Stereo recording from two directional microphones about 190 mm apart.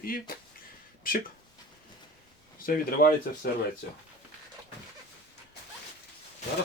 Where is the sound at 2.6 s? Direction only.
50° left (ahead or behind).